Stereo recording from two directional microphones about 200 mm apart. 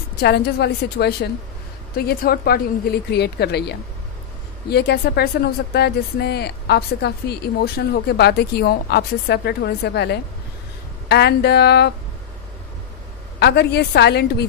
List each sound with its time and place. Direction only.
0.2 s a woman's voice: 55° left (ahead or behind)
13.4 s a woman's voice: 55° left (ahead or behind)